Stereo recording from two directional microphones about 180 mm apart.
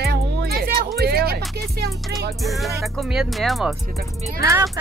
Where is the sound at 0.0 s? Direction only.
65° right (ahead or behind).